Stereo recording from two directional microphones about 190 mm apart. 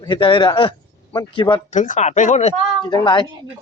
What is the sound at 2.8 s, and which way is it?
Speech, 20° left (ahead or behind).